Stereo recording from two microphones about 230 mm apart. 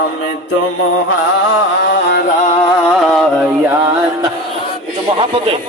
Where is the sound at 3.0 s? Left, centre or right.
Centre.